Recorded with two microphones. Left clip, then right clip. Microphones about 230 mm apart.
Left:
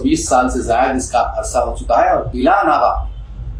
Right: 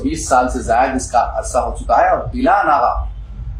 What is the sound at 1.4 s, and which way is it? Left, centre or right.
Speech, centre.